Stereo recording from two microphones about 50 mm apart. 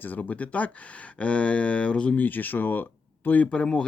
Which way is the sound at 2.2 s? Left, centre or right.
Left.